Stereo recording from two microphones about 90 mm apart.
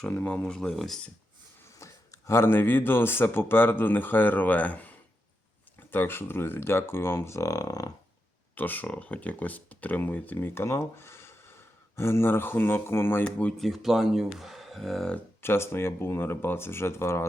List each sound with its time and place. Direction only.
0.1 s speech: 20° left (ahead or behind)
0.4 s speech: 5° left (ahead or behind)
1.8 s speech: 30° left (ahead or behind)
8.5 s speech: 20° left (ahead or behind)
13.6 s speech: centre (ahead or behind)
15.4 s speech: 25° left (ahead or behind)